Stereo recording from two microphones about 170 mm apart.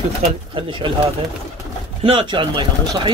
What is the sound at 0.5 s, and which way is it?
Speech, 30° right (ahead or behind).